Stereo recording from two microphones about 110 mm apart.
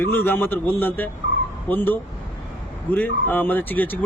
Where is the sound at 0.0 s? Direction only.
20° left (ahead or behind).